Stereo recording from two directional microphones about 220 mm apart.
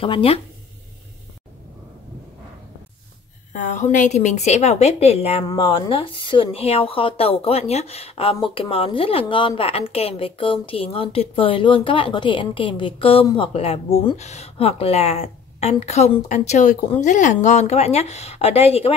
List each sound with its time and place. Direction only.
0.0 s a woman's voice: 25° left (ahead or behind)
3.5 s a woman's voice: 35° left (ahead or behind)